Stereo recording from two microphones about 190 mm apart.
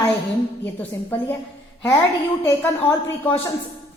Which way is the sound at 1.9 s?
10° left (ahead or behind).